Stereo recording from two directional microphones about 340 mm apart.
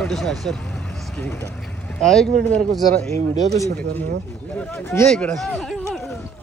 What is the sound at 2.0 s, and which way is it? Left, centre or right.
Speech, centre.